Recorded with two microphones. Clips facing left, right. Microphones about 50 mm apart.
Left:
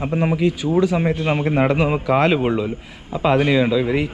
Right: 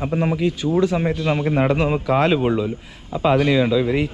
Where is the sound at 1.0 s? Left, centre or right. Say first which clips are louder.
Left 1 dB; left.